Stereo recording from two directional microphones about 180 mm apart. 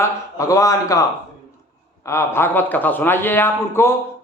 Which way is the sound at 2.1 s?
15° left (ahead or behind).